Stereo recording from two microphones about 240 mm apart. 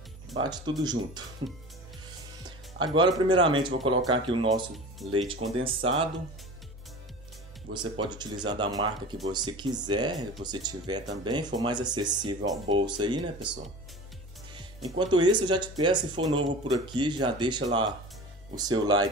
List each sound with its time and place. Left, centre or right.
0.3 s speech: centre
2.4 s speech: centre
4.7 s speech: centre
5.3 s speech: right
7.7 s speech: centre
14.5 s speech: centre